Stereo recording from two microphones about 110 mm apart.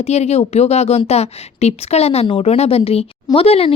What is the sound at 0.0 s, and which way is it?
A woman's voice, 80° left.